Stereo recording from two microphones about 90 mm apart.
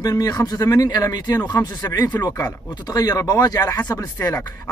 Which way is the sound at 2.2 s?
35° left (ahead or behind).